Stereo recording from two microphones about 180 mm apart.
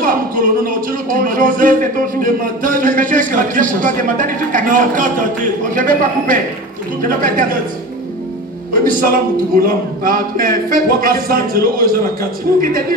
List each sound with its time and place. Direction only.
0.0 s speech: 50° right (ahead or behind)
8.8 s speech: 55° right (ahead or behind)